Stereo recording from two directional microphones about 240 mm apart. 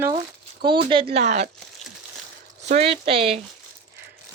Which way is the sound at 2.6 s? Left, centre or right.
Right.